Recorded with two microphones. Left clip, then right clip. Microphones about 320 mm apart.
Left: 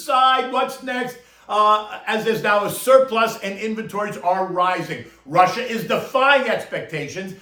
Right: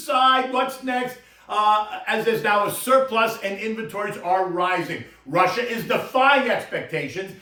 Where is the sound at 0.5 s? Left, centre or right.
Centre.